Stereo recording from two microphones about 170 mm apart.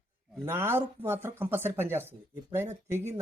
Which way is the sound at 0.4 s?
15° right (ahead or behind).